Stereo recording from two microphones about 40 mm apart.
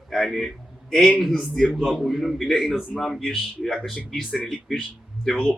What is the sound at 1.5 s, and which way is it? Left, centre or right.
A man's voice, centre.